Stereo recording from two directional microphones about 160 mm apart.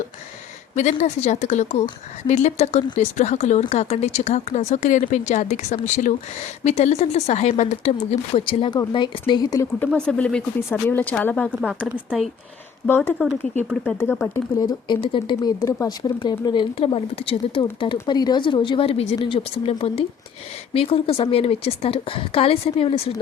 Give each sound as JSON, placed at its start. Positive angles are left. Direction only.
{"t": 0.8, "sound": "a woman's voice", "side_deg": 45}
{"t": 9.8, "sound": "speech", "side_deg": 10}
{"t": 11.6, "sound": "speech", "side_deg": -5}
{"t": 13.2, "sound": "speech", "side_deg": 10}
{"t": 14.3, "sound": "speech", "side_deg": 20}